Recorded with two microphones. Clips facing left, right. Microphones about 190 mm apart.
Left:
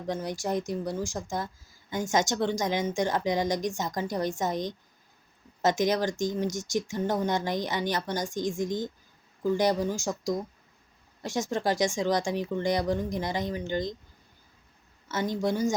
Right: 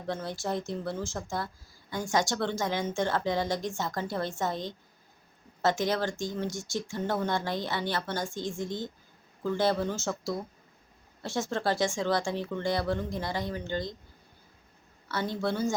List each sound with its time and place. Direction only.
0.1 s speech: 15° left (ahead or behind)
15.0 s speech: 15° left (ahead or behind)